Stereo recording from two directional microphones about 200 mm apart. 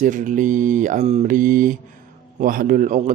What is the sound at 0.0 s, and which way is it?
A man's voice, 40° right (ahead or behind).